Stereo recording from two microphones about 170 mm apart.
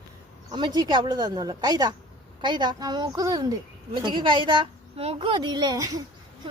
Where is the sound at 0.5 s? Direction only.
25° right (ahead or behind).